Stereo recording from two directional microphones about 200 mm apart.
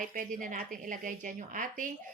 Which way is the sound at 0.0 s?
40° right (ahead or behind).